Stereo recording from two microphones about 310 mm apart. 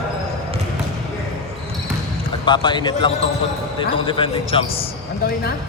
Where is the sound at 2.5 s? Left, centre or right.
Centre.